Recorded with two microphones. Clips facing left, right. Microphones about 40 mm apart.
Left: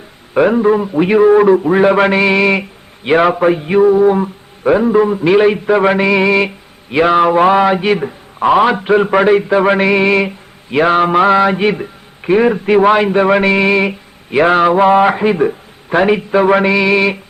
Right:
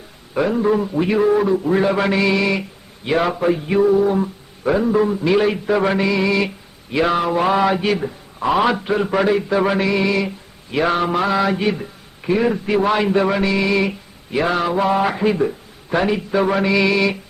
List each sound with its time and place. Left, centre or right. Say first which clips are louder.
0.3 s a man's voice: left 6 dB; left
1.4 s a man's voice: left 8 dB; left
13.3 s a man's voice: left 7 dB; left